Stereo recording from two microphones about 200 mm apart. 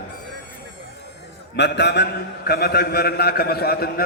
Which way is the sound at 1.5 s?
60° left (ahead or behind).